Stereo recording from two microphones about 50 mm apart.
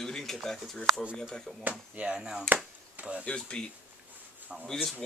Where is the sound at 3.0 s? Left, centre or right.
Right.